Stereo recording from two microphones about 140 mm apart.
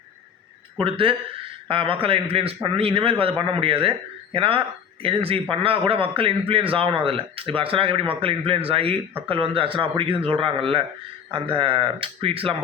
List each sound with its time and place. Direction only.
0.8 s a man's voice: 40° right (ahead or behind)